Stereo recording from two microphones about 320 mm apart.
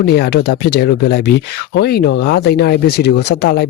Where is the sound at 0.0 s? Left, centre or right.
Left.